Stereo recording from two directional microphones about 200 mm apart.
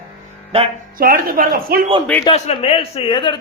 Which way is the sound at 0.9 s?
45° right (ahead or behind).